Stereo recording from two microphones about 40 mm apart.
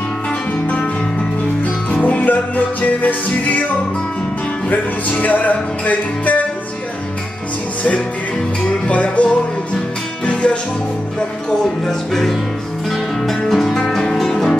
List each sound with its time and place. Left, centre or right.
1.9 s music: left
5.2 s music: left
8.6 s music: left
11.8 s music: centre
13.7 s music: centre
14.1 s music: centre